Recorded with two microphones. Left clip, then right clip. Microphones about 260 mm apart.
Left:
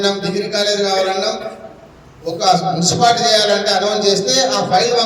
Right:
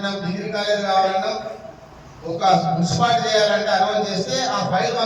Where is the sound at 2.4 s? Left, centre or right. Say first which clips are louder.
Left 3 dB; left.